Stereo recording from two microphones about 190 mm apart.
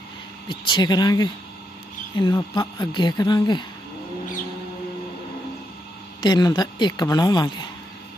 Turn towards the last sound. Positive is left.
turn(degrees=20)  # may be behind; listen again after turning